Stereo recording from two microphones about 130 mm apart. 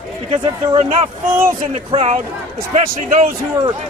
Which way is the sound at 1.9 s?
50° right (ahead or behind).